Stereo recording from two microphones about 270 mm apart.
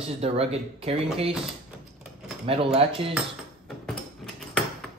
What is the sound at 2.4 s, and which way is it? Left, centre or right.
Speech, right.